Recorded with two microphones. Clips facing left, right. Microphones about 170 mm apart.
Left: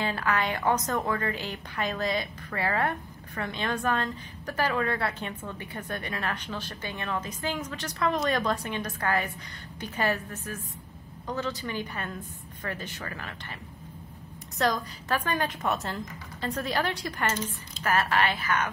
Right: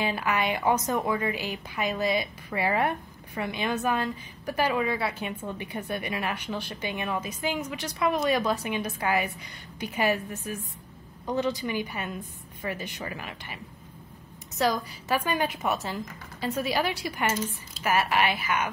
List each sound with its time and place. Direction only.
0.0 s speech: 10° right (ahead or behind)
14.6 s speech: 10° right (ahead or behind)